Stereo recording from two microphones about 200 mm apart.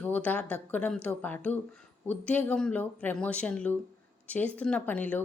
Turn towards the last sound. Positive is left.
turn(degrees=5)  # may be behind; listen again after turning